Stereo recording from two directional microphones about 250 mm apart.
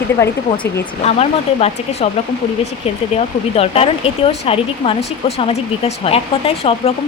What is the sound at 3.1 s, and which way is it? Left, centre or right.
Speech, left.